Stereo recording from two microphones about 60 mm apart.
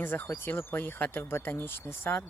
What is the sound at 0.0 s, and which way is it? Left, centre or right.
Speech, left.